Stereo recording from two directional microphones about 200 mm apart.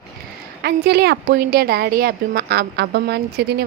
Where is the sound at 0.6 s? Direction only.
55° right (ahead or behind).